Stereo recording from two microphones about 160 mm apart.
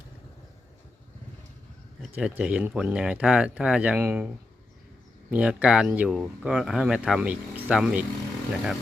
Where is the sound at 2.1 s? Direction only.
10° right (ahead or behind).